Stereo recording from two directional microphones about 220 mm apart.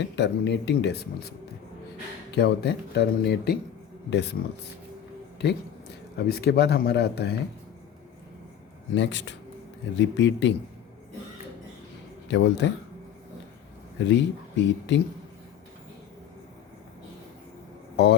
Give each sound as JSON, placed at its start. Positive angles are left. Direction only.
{"t": 0.2, "sound": "speech", "side_deg": 50}
{"t": 2.3, "sound": "speech", "side_deg": 50}
{"t": 9.0, "sound": "a man's voice", "side_deg": 55}
{"t": 12.3, "sound": "speech", "side_deg": 55}
{"t": 14.0, "sound": "speech", "side_deg": 55}
{"t": 17.9, "sound": "a man's voice", "side_deg": 50}